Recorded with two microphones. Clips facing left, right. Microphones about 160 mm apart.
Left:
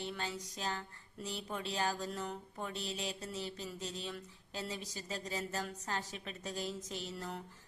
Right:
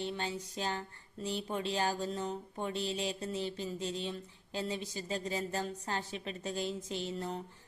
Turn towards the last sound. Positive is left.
turn(degrees=-25)  # may be behind; listen again after turning